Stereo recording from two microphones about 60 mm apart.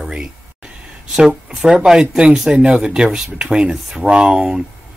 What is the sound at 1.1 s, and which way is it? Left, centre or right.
Speech, centre.